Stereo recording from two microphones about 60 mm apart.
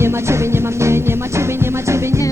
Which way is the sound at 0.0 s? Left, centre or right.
Right.